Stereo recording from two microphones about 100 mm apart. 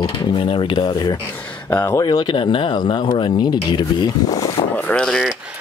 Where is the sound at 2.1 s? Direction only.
55° left (ahead or behind).